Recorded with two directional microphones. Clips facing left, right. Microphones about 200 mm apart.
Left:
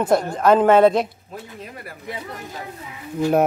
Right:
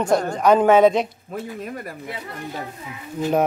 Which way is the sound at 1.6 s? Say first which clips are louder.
Right 6 dB; 45° right (ahead or behind).